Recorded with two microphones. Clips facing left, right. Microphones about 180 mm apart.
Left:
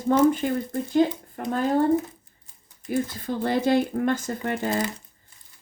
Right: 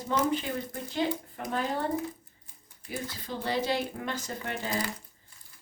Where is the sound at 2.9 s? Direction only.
50° left (ahead or behind).